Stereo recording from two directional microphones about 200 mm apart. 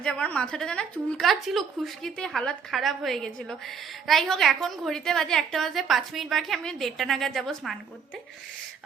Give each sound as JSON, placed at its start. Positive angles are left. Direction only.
{"t": 0.0, "sound": "a woman's voice", "side_deg": 5}